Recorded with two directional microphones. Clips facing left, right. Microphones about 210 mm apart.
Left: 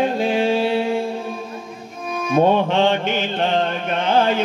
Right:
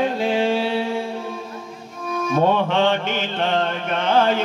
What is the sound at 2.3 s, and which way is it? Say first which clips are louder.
Mantra: left 3 dB; 15° left (ahead or behind).